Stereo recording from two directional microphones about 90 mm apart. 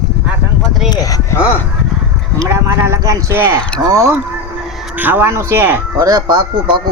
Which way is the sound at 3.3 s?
25° right (ahead or behind).